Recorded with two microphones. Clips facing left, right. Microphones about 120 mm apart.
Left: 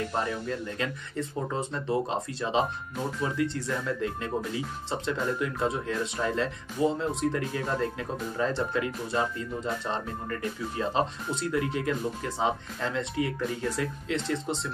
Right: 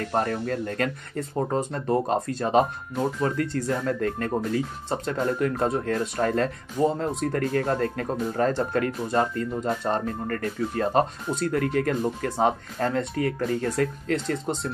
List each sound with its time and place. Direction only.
0.0 s speech: 55° right (ahead or behind)